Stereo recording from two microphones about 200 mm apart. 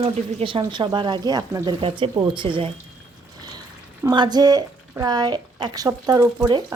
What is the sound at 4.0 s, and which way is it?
A woman's voice, 20° right (ahead or behind).